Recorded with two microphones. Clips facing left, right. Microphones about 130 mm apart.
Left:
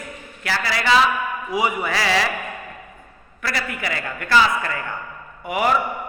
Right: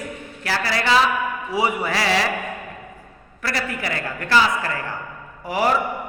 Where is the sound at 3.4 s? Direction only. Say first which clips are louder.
Right 1 dB; 35° right (ahead or behind).